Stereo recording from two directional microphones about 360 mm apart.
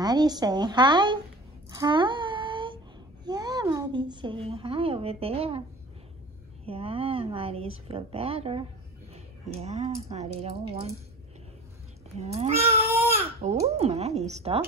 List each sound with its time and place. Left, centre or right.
0.0 s a woman's voice: centre
1.8 s a sound: centre
3.3 s a woman's voice: centre
6.6 s a woman's voice: centre
12.2 s a woman's voice: centre